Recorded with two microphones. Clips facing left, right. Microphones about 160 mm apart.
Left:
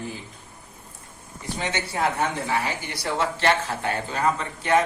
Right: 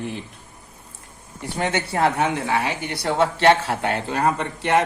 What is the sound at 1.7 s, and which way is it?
A man's voice, 65° right (ahead or behind).